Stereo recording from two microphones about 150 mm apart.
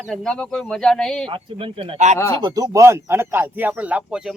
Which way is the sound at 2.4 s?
25° right (ahead or behind).